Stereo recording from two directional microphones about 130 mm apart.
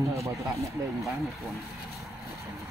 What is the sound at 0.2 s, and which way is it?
Speech, 25° right (ahead or behind).